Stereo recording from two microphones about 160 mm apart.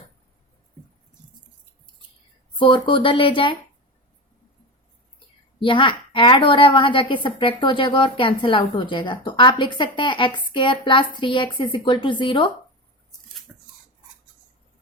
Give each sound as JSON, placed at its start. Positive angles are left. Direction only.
{"t": 2.6, "sound": "a woman's voice", "side_deg": 30}
{"t": 5.5, "sound": "a woman's voice", "side_deg": 30}
{"t": 13.5, "sound": "a sound", "side_deg": -5}